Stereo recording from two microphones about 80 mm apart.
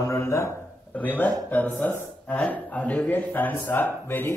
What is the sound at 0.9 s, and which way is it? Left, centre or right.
A man's voice, left.